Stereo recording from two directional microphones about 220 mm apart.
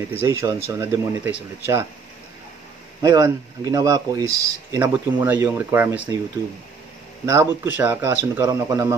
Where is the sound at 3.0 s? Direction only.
15° right (ahead or behind).